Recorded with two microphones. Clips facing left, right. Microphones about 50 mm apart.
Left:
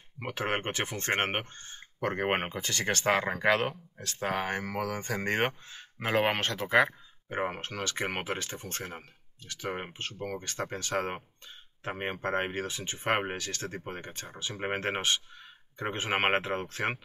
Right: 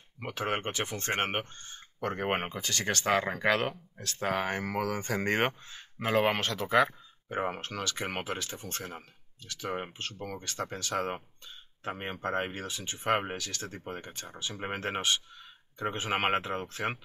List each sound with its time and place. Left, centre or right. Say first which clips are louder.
0.3 s speech: left 1 dB; left
3.1 s speech: left 1 dB; centre
5.9 s speech: even; left
9.5 s speech: even; left